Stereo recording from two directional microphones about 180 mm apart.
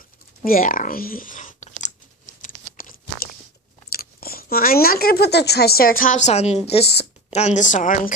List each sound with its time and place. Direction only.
0.4 s speech: 50° left (ahead or behind)
2.4 s crunch: 50° left (ahead or behind)
3.9 s speech: 55° left (ahead or behind)